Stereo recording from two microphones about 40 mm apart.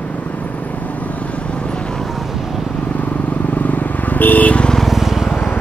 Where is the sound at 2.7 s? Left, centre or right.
Left.